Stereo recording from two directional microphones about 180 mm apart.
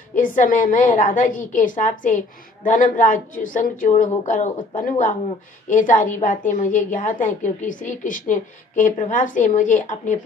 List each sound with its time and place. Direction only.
0.1 s a woman's voice: 45° left (ahead or behind)